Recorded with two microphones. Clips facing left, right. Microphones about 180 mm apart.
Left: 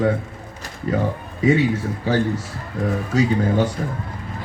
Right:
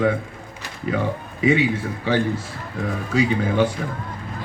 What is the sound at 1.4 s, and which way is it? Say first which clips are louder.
Speech: left 1 dB; 40° left (ahead or behind).